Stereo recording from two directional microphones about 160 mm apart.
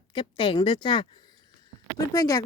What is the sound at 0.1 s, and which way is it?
A woman's voice, 30° left (ahead or behind).